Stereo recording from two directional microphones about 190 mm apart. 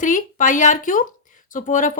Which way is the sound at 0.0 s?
45° left (ahead or behind).